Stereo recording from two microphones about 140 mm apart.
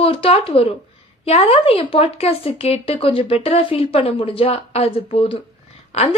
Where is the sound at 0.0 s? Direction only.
40° left (ahead or behind).